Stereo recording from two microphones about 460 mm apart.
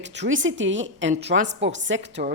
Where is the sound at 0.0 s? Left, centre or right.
Right.